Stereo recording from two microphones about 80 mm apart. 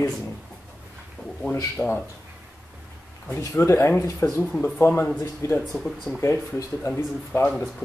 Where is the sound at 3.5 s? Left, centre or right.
Left.